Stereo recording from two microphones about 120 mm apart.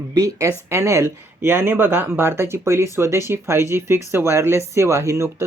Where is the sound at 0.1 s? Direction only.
25° right (ahead or behind).